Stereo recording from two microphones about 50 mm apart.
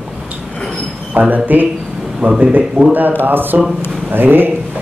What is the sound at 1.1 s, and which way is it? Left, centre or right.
Speech, right.